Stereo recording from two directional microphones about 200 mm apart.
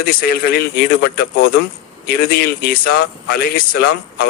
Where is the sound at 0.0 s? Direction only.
45° left (ahead or behind).